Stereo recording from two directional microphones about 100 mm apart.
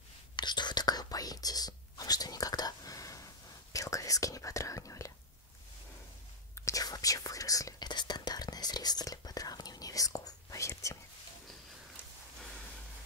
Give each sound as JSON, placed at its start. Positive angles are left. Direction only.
{"t": 0.4, "sound": "whispering", "side_deg": 45}
{"t": 6.6, "sound": "whispering", "side_deg": 35}